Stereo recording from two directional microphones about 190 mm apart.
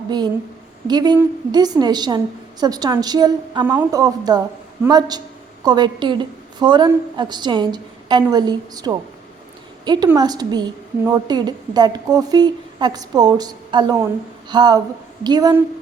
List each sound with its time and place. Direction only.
0.9 s a woman's voice: 20° right (ahead or behind)
3.6 s a woman's voice: 10° right (ahead or behind)